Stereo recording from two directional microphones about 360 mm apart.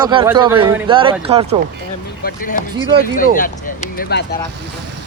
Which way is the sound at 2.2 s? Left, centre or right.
Left.